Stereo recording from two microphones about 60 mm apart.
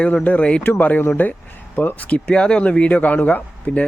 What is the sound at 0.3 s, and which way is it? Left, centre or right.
Speech, centre.